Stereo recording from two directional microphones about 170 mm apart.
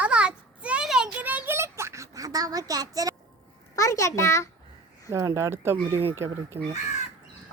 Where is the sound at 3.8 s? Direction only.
20° left (ahead or behind).